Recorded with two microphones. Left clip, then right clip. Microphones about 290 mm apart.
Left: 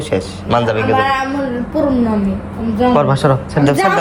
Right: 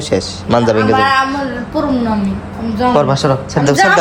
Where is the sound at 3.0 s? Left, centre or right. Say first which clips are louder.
Right 1 dB; centre.